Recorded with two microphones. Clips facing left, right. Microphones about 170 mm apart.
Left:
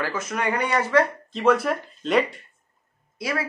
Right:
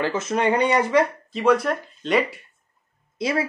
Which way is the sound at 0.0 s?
25° right (ahead or behind).